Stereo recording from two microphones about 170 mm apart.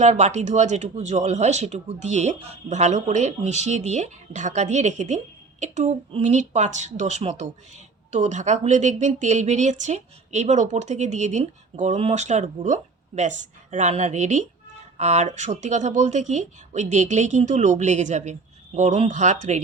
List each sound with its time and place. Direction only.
0.0 s speech: 45° right (ahead or behind)